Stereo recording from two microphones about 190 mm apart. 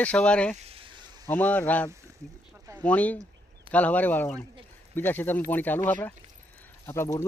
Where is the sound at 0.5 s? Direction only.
30° right (ahead or behind).